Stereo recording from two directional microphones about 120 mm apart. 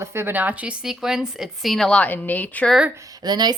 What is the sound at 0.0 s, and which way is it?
A woman's voice, 20° right (ahead or behind).